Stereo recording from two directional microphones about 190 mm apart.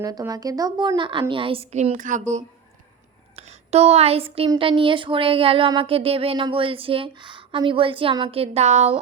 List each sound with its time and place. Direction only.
0.0 s a woman's voice: 20° right (ahead or behind); by 9.0 s 35° right (ahead or behind)